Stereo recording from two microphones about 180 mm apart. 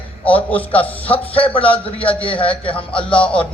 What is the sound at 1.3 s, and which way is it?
Speech, 30° left (ahead or behind).